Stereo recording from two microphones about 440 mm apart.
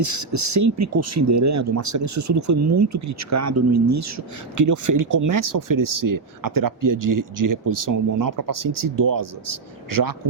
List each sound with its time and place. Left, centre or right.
0.0 s speech: right